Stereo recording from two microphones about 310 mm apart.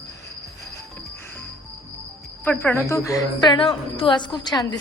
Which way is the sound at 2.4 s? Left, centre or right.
Centre.